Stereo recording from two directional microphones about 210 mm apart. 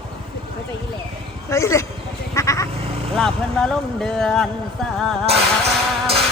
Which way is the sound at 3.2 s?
Centre (ahead or behind).